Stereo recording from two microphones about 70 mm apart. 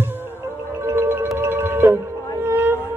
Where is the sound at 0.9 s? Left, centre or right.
Right.